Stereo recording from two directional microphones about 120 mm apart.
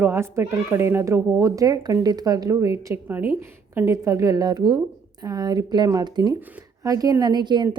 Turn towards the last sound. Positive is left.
turn(degrees=-40)  # may be behind; listen again after turning